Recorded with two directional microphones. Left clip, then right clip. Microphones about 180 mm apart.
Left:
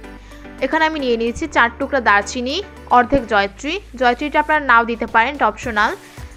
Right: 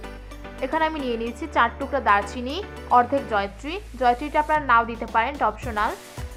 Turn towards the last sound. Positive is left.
turn(degrees=25)  # may be behind; listen again after turning